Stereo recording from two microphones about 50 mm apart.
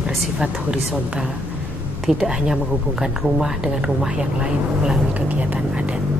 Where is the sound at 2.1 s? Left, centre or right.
Centre.